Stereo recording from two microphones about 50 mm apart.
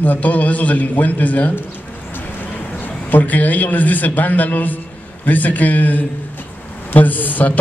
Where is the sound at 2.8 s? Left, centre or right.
Left.